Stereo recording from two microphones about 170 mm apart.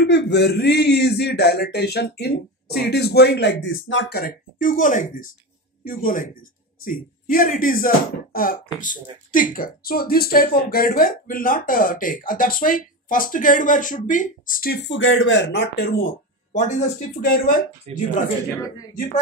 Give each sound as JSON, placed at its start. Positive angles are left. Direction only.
{"t": 0.0, "sound": "speech", "side_deg": 90}
{"t": 16.5, "sound": "speech", "side_deg": 45}
{"t": 17.2, "sound": "speech", "side_deg": 60}
{"t": 17.9, "sound": "speech", "side_deg": -40}